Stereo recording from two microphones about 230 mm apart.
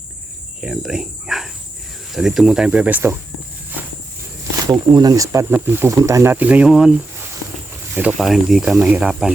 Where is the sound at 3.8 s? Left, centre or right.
Centre.